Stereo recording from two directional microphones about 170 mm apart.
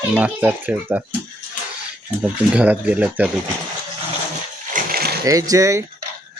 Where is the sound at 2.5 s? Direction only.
10° right (ahead or behind).